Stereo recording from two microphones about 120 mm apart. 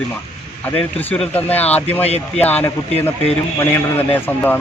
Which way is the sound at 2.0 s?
60° left (ahead or behind).